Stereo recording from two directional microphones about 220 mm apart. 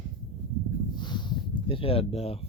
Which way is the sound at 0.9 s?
20° left (ahead or behind).